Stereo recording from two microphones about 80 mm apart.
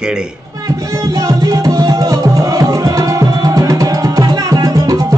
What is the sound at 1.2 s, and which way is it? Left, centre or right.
Music, right.